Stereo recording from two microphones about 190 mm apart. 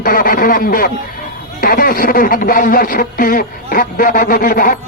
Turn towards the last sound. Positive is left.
turn(degrees=50)  # may be behind; listen again after turning